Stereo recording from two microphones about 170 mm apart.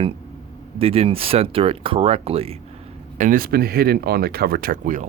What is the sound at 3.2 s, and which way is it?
Speech, 55° right (ahead or behind).